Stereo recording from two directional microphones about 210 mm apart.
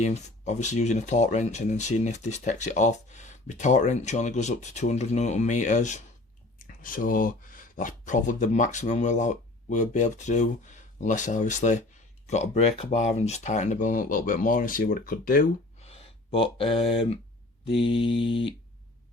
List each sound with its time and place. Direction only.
0.0 s speech: 35° left (ahead or behind)
15.8 s speech: 30° left (ahead or behind)
17.8 s mantra: 25° left (ahead or behind)